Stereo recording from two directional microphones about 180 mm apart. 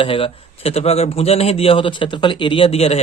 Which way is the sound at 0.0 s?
30° left (ahead or behind).